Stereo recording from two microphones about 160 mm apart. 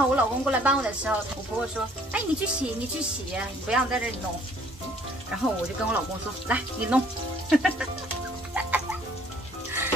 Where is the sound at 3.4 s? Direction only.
5° right (ahead or behind).